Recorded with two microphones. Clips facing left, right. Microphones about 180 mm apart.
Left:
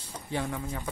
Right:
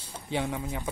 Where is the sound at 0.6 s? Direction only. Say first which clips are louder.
Right 2 dB; 10° right (ahead or behind).